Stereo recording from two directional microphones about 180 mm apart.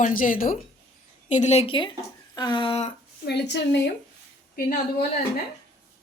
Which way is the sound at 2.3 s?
25° left (ahead or behind).